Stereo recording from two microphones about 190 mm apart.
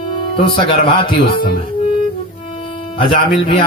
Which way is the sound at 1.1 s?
50° left (ahead or behind).